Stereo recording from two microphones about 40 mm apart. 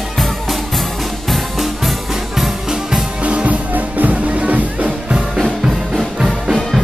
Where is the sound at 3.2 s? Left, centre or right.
Right.